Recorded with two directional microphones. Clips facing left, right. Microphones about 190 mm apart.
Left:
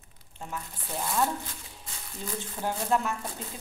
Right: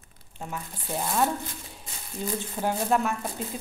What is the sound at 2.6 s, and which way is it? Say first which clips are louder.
Speech: right 3 dB; 15° right (ahead or behind).